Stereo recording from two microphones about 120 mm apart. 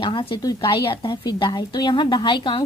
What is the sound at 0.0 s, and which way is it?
A woman's voice, 45° left (ahead or behind).